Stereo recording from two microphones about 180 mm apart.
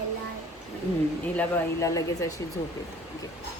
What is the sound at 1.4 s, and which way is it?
Speech, 15° left (ahead or behind).